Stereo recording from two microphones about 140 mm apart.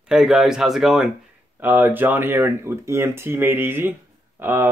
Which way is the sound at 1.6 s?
15° right (ahead or behind).